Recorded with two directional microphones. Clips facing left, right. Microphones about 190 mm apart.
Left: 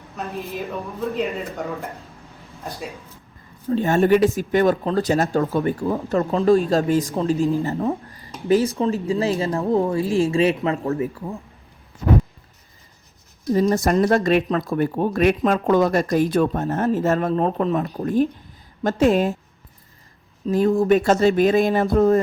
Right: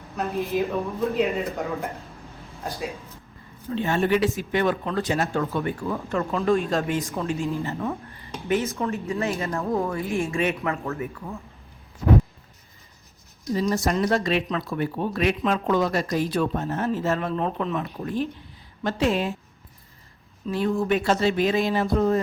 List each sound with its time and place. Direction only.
0.3 s speech: centre (ahead or behind)
2.4 s a sound: centre (ahead or behind)
3.7 s speech: 45° left (ahead or behind)
13.5 s speech: 50° left (ahead or behind)
20.5 s speech: 40° left (ahead or behind)